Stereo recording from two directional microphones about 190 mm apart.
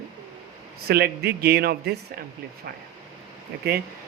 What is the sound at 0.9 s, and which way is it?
Speech, 55° right (ahead or behind).